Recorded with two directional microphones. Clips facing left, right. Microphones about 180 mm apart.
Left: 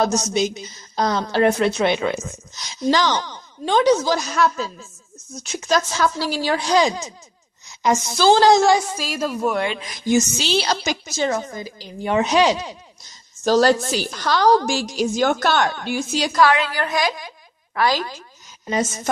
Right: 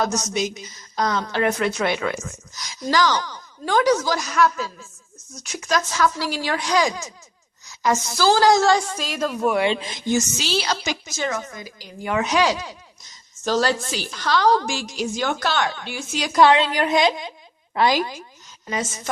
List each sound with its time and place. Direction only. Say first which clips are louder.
0.0 s a woman's voice: left 4 dB; 30° left (ahead or behind)
8.6 s a woman's voice: left 2 dB; 10° left (ahead or behind)
9.7 s a woman's voice: right 4 dB; 25° right (ahead or behind)
10.3 s a woman's voice: left 3 dB; 30° left (ahead or behind)
13.4 s a woman's voice: left 5 dB; 40° left (ahead or behind)
16.3 s a woman's voice: right 3 dB; 25° right (ahead or behind)